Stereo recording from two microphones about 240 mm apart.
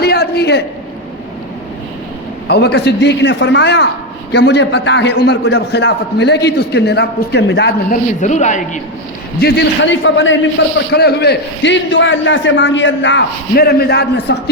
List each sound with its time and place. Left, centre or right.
0.0 s a sound: left
2.5 s a man's voice: left
8.2 s a man's voice: left
9.4 s a man's voice: left